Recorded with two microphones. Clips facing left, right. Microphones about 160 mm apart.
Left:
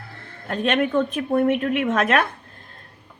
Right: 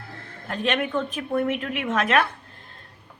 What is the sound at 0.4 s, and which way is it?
A woman's voice, 50° left (ahead or behind).